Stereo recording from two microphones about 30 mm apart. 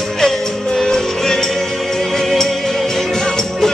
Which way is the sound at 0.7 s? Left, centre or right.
Centre.